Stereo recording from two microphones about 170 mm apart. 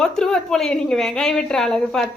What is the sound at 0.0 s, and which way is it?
A woman's voice, 5° left (ahead or behind).